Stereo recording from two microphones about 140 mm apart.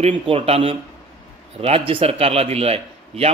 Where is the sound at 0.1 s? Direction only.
40° right (ahead or behind).